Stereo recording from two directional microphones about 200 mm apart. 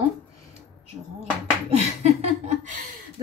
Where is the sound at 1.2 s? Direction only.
35° right (ahead or behind).